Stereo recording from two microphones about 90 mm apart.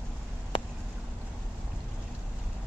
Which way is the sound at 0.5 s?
75° left (ahead or behind).